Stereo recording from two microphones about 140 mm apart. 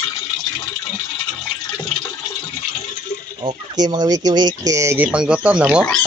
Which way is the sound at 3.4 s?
30° right (ahead or behind).